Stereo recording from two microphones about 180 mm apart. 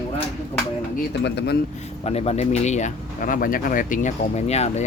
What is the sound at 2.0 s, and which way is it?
Speech, 35° left (ahead or behind).